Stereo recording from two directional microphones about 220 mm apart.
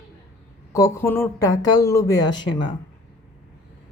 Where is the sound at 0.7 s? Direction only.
15° left (ahead or behind).